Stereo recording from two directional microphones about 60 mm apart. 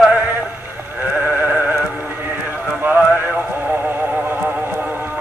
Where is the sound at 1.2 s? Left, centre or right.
Right.